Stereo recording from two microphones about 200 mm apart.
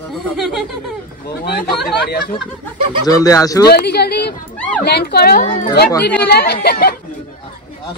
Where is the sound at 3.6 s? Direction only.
55° left (ahead or behind).